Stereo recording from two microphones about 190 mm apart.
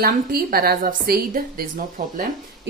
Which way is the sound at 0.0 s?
50° right (ahead or behind).